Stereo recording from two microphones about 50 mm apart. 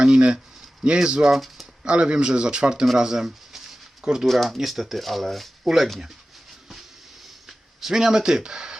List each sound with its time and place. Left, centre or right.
0.0 s speech: centre
1.3 s speech: centre
1.8 s speech: centre
3.0 s a sound: centre
4.0 s speech: centre
4.3 s speech: centre
7.4 s a sound: centre